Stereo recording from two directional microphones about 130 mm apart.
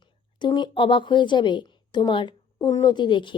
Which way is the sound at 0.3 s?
35° left (ahead or behind).